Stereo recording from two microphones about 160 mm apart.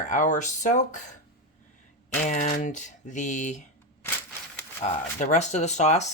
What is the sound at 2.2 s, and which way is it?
Speech, 50° left (ahead or behind).